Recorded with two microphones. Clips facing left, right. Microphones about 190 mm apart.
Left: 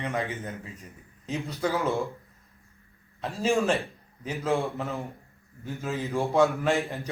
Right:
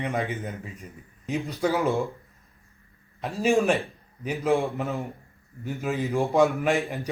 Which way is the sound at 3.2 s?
15° right (ahead or behind).